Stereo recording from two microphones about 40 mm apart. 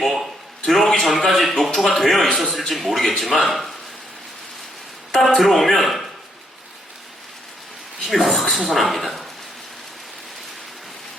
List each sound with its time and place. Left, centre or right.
0.0 s a sound: centre
1.0 s speech: centre
5.1 s speech: centre
8.0 s speech: centre